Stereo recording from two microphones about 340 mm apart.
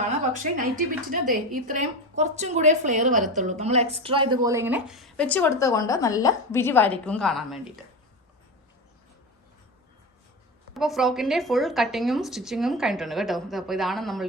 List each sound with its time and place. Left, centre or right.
0.5 s a woman's voice: right; by 7.7 s centre
10.8 s speech: centre